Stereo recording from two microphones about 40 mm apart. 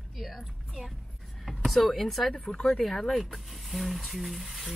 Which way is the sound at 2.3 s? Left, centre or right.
Centre.